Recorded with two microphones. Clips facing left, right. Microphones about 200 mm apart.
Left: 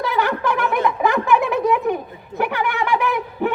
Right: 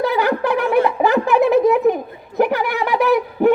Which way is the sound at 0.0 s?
35° right (ahead or behind).